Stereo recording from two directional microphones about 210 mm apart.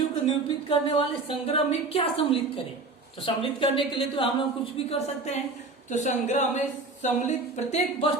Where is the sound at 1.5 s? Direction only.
30° left (ahead or behind).